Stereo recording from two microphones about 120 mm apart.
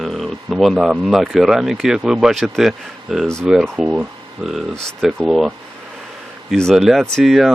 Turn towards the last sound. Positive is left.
turn(degrees=0)  # may be behind; listen again after turning